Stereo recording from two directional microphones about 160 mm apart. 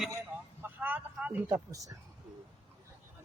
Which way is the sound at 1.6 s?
20° right (ahead or behind).